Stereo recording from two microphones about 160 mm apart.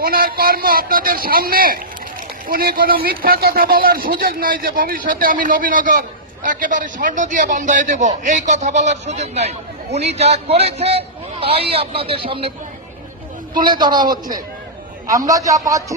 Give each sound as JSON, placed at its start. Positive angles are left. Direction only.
{"t": 0.0, "sound": "a man's voice", "side_deg": -65}
{"t": 13.7, "sound": "a man's voice", "side_deg": -25}